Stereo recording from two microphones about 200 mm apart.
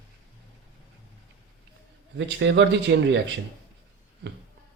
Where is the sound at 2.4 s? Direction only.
65° right (ahead or behind).